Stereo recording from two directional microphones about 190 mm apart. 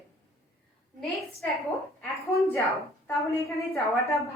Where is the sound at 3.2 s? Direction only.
15° left (ahead or behind).